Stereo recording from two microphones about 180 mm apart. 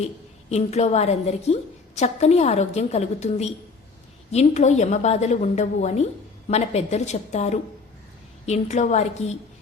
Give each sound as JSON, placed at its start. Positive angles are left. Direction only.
{"t": 0.5, "sound": "a woman's voice", "side_deg": 35}